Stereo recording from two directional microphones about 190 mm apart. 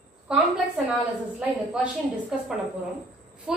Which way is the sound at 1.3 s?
5° right (ahead or behind).